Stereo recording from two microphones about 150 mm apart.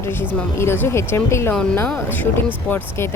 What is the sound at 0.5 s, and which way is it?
Speech, 15° left (ahead or behind).